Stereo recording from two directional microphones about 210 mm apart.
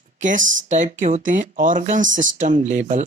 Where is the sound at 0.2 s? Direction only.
35° right (ahead or behind).